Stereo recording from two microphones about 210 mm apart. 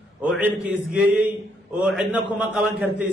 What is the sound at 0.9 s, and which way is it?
A man's voice, 5° right (ahead or behind).